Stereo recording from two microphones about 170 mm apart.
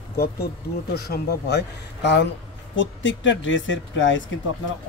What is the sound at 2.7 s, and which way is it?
Speech, 90° left.